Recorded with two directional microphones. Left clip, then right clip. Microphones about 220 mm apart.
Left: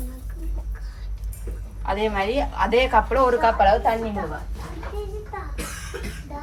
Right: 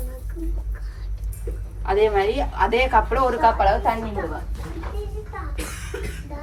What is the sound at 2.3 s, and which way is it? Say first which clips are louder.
A woman's voice: even; 40° left (ahead or behind).